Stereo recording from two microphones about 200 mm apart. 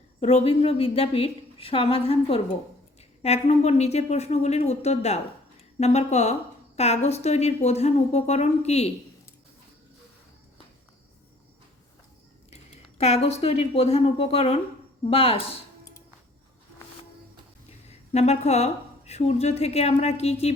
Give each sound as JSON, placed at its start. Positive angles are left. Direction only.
{"t": 0.2, "sound": "a woman's voice", "side_deg": 30}
{"t": 12.7, "sound": "a woman's voice", "side_deg": 30}
{"t": 17.8, "sound": "a woman's voice", "side_deg": 35}